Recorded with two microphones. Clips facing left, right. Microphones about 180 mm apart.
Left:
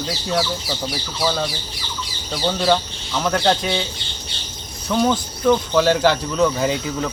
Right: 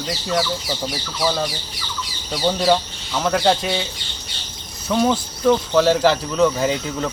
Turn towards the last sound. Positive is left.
turn(degrees=0)  # may be behind; listen again after turning